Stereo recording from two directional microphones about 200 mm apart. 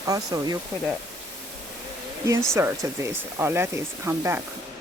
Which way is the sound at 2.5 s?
15° right (ahead or behind).